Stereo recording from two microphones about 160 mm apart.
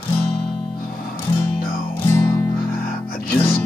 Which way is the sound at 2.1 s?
20° left (ahead or behind).